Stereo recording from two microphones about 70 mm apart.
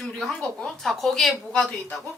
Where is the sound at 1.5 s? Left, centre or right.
Centre.